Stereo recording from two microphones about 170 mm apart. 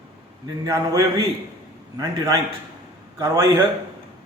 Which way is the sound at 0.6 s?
20° right (ahead or behind).